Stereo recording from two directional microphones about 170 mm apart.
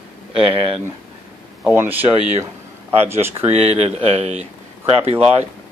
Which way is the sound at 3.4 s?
40° right (ahead or behind).